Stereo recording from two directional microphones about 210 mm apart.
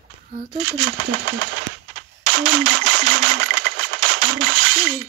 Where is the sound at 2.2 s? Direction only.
90° right.